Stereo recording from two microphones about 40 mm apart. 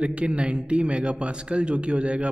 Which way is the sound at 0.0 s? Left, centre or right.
Right.